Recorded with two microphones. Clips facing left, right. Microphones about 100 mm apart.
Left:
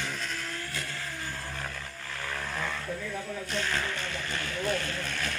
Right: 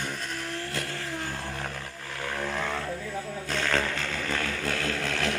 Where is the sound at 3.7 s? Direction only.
90° right.